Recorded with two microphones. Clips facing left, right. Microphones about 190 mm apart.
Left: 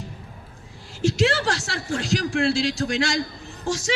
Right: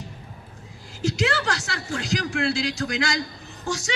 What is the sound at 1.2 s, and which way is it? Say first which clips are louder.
A man's voice: left 3 dB; 30° left (ahead or behind).